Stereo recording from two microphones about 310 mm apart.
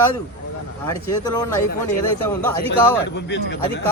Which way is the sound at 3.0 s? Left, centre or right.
Left.